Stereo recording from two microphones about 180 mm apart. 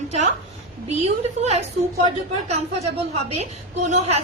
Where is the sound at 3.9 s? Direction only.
35° right (ahead or behind).